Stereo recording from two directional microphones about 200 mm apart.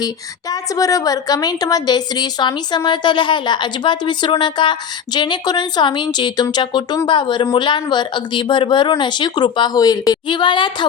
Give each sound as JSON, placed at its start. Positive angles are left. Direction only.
{"t": 0.5, "sound": "a woman's voice", "side_deg": 15}